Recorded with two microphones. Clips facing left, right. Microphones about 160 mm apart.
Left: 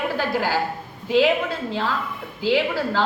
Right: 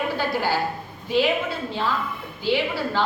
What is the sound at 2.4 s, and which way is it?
Speech, 90° left.